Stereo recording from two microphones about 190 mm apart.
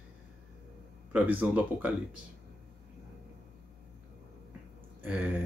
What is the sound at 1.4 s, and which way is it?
Speech, 5° right (ahead or behind).